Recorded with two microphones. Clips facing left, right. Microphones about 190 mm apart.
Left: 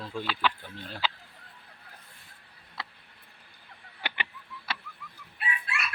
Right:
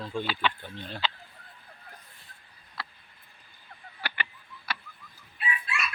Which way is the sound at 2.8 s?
20° left (ahead or behind).